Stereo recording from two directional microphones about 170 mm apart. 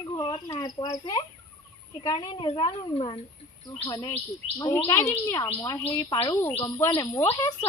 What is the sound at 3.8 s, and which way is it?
Speech, 25° left (ahead or behind).